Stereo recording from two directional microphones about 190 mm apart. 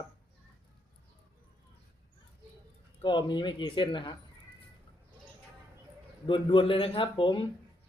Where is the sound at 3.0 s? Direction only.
25° left (ahead or behind).